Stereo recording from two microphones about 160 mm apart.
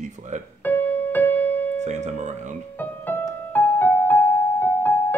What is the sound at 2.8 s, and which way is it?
Music, 10° left (ahead or behind).